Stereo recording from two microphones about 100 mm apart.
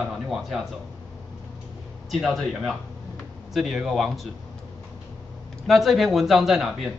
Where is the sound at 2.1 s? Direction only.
Centre (ahead or behind).